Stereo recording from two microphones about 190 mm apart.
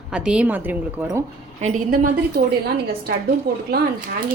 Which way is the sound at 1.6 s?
45° right (ahead or behind).